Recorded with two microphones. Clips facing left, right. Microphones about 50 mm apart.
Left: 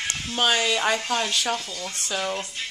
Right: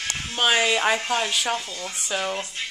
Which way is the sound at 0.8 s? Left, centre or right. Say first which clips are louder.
Right 1 dB; centre.